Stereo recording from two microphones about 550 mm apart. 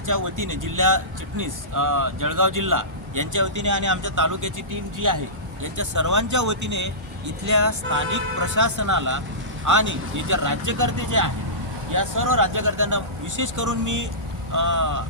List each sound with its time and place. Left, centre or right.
0.0 s speech: right